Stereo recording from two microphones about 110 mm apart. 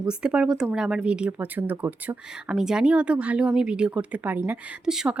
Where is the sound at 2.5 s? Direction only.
5° right (ahead or behind).